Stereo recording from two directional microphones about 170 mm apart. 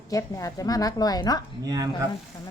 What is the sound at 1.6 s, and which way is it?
Speech, 20° right (ahead or behind).